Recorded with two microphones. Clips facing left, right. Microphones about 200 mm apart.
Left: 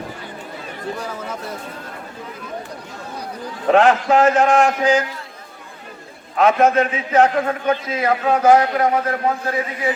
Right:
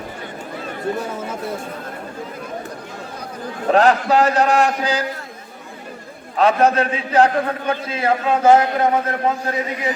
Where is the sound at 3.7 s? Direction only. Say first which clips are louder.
Left 1 dB; 35° right (ahead or behind).